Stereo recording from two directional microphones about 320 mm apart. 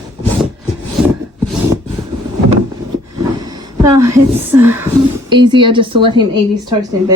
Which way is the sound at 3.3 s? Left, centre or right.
Centre.